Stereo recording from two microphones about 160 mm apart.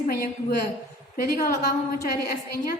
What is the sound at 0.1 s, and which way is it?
A woman's voice, 70° left (ahead or behind).